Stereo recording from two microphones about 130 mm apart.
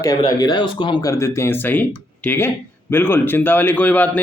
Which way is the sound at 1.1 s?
20° left (ahead or behind).